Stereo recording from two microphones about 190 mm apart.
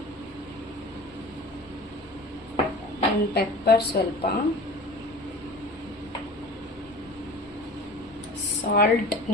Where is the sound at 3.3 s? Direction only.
60° left (ahead or behind).